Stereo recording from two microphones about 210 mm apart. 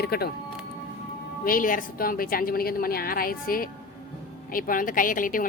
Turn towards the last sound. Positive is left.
turn(degrees=40)  # may be behind; listen again after turning